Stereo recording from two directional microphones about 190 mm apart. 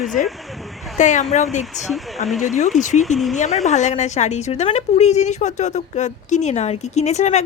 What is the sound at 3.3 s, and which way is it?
A woman's voice, 35° left (ahead or behind).